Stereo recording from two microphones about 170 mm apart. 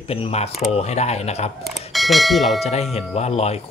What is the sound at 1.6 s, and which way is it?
Speech, centre (ahead or behind).